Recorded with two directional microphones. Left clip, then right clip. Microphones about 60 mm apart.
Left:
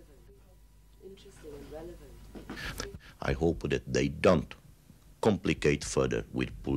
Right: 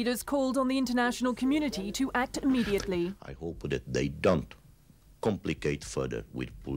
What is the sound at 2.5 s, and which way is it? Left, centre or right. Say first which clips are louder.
Speech: right 6 dB; left.